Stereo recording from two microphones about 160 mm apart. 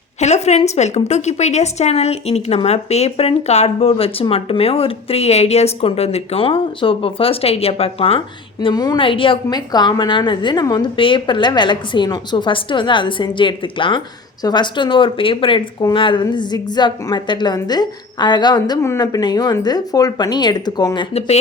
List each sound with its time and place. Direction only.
0.2 s a woman's voice: 45° left (ahead or behind)
8.6 s speech: 25° left (ahead or behind)
21.1 s a woman's voice: 40° left (ahead or behind)